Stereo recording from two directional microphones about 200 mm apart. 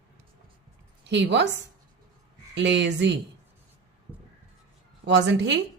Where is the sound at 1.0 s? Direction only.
60° right (ahead or behind).